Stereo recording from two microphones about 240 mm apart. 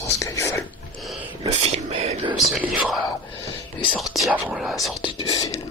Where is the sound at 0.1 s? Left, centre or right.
Centre.